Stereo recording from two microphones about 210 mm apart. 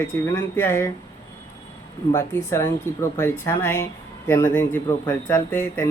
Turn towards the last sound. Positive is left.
turn(degrees=10)  # may be behind; listen again after turning